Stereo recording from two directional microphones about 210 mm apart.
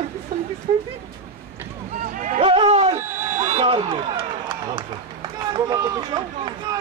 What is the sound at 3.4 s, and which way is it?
Run, 25° right (ahead or behind).